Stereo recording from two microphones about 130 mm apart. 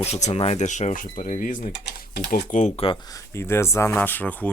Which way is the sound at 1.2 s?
60° left (ahead or behind).